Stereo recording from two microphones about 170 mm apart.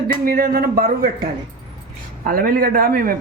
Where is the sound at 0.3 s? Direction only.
65° right (ahead or behind).